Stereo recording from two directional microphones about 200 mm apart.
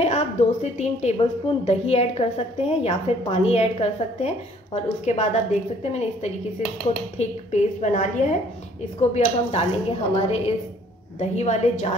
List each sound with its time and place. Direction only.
0.0 s a woman's voice: 35° left (ahead or behind)